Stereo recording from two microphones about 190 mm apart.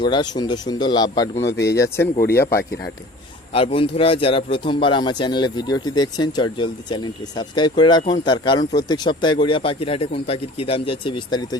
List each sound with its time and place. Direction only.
0.0 s a man's voice: 25° left (ahead or behind)
1.5 s speech: 60° left (ahead or behind)
2.0 s speech: 50° left (ahead or behind)
3.5 s a man's voice: 30° left (ahead or behind)